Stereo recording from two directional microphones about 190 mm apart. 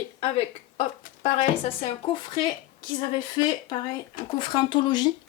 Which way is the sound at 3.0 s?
25° left (ahead or behind).